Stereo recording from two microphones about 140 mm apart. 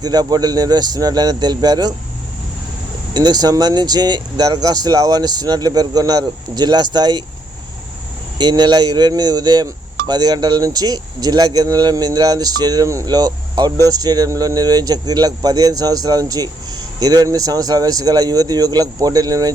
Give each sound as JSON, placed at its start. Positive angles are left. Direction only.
{"t": 0.0, "sound": "speech", "side_deg": -25}
{"t": 3.2, "sound": "speech", "side_deg": -30}
{"t": 8.4, "sound": "speech", "side_deg": -30}